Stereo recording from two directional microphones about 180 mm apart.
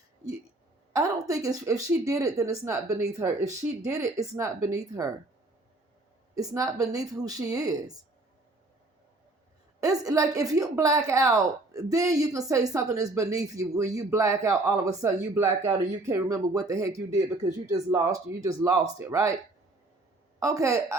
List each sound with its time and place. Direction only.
0.9 s a woman's voice: 20° right (ahead or behind)
6.3 s a woman's voice: 20° right (ahead or behind)
9.8 s a woman's voice: 20° right (ahead or behind)
20.4 s a woman's voice: 20° right (ahead or behind)